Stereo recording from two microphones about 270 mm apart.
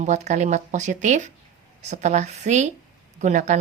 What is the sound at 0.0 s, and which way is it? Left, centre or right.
A woman's voice, right.